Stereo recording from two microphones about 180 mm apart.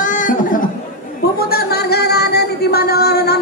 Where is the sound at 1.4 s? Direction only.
60° left (ahead or behind).